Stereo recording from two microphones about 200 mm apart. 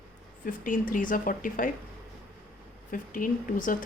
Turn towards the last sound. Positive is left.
turn(degrees=40)  # may be behind; listen again after turning